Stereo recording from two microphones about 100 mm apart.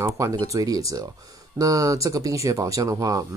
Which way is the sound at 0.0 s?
35° right (ahead or behind).